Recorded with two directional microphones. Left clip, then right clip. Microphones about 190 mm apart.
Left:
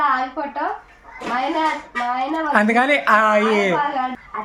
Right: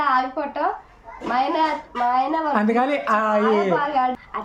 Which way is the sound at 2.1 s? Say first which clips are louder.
Right 3 dB; 25° right (ahead or behind).